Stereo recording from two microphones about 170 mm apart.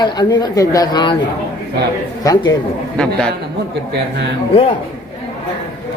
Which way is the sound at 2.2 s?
20° left (ahead or behind).